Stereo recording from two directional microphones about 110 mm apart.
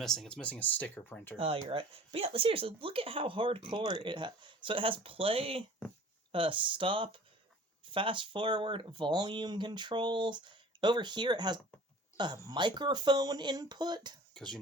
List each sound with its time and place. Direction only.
0.0 s speech: 5° left (ahead or behind)
1.4 s speech: 60° right (ahead or behind); by 14.2 s 40° right (ahead or behind)
14.3 s speech: 5° left (ahead or behind)